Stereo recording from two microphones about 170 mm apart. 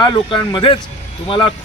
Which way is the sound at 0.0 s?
30° left (ahead or behind).